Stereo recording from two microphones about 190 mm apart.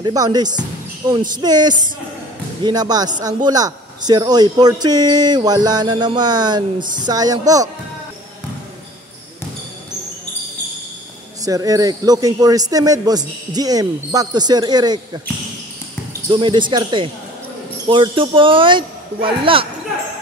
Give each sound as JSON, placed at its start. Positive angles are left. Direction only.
{"t": 0.0, "sound": "speech", "side_deg": -20}
{"t": 11.4, "sound": "speech", "side_deg": -20}
{"t": 16.3, "sound": "speech", "side_deg": -25}